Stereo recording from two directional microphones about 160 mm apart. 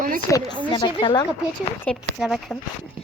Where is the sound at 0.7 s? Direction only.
30° left (ahead or behind).